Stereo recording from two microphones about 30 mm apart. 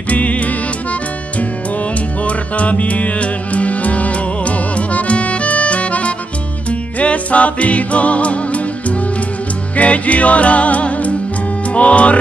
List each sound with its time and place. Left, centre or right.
0.1 s music: left
2.2 s music: left